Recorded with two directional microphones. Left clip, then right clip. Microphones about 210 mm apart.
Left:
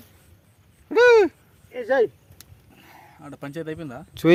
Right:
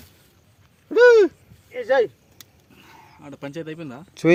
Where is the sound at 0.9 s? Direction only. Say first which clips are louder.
Right 2 dB; 30° left (ahead or behind).